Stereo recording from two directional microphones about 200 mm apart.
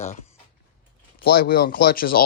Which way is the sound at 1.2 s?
50° left (ahead or behind).